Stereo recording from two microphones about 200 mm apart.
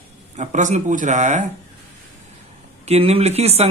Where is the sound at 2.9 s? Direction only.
30° right (ahead or behind).